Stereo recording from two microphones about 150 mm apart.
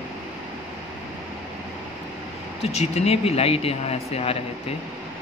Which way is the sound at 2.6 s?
45° left (ahead or behind).